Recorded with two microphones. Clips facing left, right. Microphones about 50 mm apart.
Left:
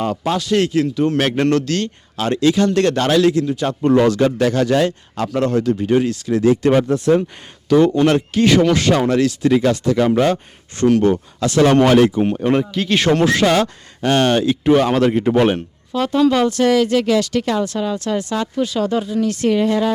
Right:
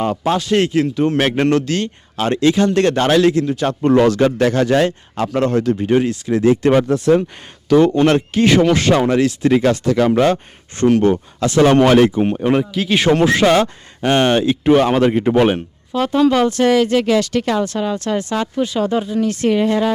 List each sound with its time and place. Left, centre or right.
0.0 s speech: right
2.1 s speech: right
4.3 s speech: right
6.7 s speech: right
7.7 s speech: right
8.3 s speech: right
9.9 s speech: right
10.8 s speech: right
12.4 s speech: centre
13.1 s speech: right
14.9 s speech: right